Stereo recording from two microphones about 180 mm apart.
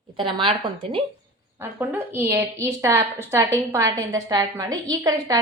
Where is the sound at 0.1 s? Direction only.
25° right (ahead or behind).